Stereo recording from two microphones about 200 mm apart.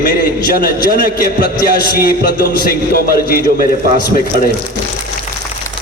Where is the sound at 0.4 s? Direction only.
45° left (ahead or behind).